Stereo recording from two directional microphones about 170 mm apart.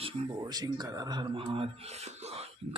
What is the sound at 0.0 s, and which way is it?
Speech, 25° right (ahead or behind).